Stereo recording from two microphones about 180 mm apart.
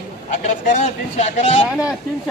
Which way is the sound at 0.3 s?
45° left (ahead or behind).